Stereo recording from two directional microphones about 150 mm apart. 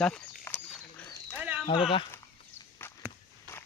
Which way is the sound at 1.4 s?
10° right (ahead or behind).